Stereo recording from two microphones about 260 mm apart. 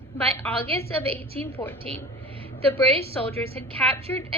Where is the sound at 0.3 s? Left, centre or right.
Centre.